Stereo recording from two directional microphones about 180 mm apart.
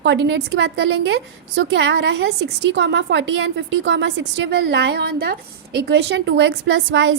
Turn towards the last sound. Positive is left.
turn(degrees=-90)